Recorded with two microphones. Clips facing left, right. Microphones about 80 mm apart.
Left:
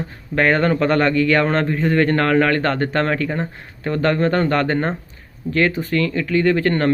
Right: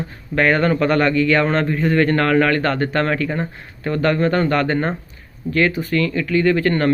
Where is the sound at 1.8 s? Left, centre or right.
Left.